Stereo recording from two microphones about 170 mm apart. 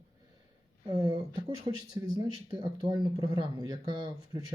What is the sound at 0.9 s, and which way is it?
Speech, 25° right (ahead or behind).